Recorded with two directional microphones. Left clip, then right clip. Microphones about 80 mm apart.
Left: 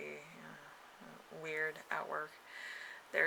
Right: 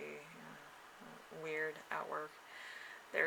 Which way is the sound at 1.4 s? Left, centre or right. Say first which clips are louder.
Left 2 dB; left.